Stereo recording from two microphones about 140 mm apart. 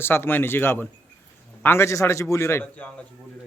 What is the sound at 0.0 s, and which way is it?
A man's voice, 15° left (ahead or behind).